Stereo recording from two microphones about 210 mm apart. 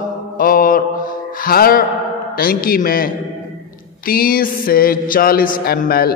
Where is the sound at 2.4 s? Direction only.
45° left (ahead or behind).